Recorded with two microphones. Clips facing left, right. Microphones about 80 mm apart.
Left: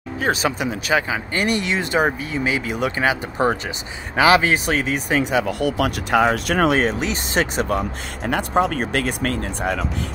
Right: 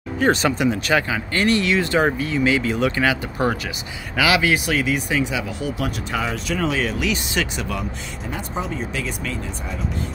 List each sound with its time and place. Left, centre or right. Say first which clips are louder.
0.2 s speech: right 3 dB; centre
1.0 s speech: right 1 dB; centre; by 6.8 s left
6.8 s speech: left 2 dB; left
8.3 s speech: left 9 dB; left